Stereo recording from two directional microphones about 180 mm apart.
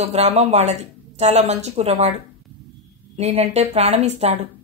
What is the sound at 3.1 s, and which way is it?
Speech, 35° right (ahead or behind).